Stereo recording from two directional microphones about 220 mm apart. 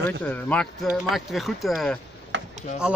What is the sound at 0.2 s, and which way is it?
Speech, 5° left (ahead or behind).